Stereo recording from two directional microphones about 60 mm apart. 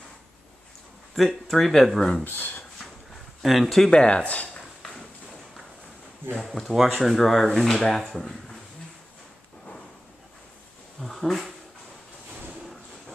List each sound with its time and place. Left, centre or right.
1.1 s speech: centre
2.2 s speech: left
3.6 s speech: centre
6.3 s speech: centre
11.0 s speech: centre